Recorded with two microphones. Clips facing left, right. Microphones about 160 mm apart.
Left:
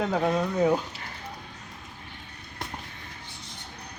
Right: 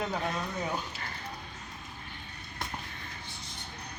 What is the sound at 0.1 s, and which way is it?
Speech, 60° left (ahead or behind).